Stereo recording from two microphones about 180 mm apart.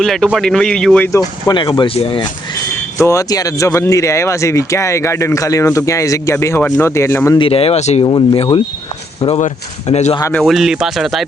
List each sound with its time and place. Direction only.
0.0 s speech: centre (ahead or behind)
1.5 s speech: 20° left (ahead or behind)
3.0 s speech: 15° left (ahead or behind)
7.3 s speech: 30° left (ahead or behind)
10.3 s speech: centre (ahead or behind)